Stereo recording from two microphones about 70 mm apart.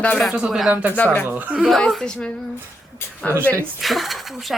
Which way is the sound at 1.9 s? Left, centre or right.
Centre.